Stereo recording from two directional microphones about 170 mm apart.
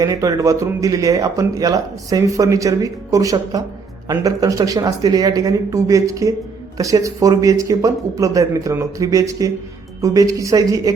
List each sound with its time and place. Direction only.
0.0 s speech: 20° right (ahead or behind)